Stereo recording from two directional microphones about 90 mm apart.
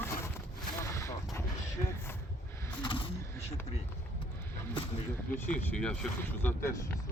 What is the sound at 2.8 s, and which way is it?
Vehicle, 65° left (ahead or behind).